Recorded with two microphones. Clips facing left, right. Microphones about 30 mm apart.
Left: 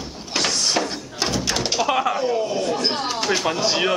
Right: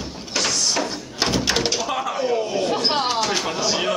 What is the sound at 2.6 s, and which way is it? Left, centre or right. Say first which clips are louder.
Chatter: right 2 dB; right.